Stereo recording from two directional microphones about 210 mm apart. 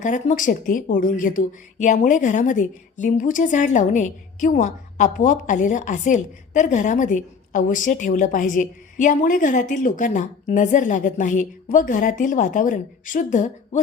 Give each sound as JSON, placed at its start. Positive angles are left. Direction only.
{"t": 0.0, "sound": "speech", "side_deg": 35}